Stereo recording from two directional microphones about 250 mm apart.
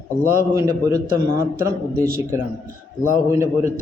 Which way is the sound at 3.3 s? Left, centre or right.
Centre.